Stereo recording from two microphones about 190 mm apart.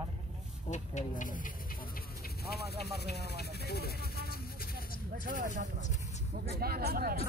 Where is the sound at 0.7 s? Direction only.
40° left (ahead or behind).